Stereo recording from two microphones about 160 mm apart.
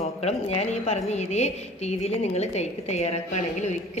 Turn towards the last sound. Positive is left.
turn(degrees=45)  # may be behind; listen again after turning